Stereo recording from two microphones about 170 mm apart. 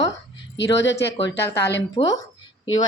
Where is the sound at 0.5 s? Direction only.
90° left.